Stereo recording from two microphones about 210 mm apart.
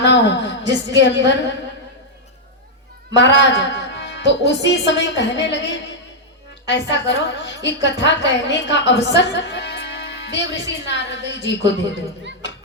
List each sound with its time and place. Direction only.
0.0 s a woman's voice: 60° left (ahead or behind)
3.2 s a woman's voice: 55° left (ahead or behind)